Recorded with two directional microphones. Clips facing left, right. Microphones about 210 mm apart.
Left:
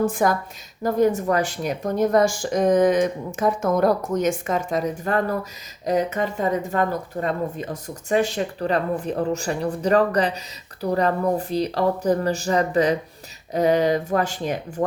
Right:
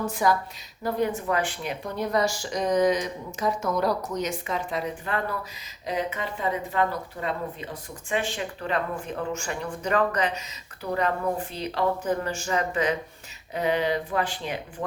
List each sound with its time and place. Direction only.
0.0 s speech: 50° left (ahead or behind)